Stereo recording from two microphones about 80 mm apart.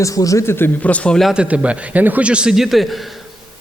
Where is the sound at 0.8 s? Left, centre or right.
Centre.